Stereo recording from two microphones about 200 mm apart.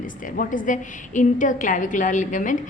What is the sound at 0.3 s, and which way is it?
A woman's voice, 40° left (ahead or behind).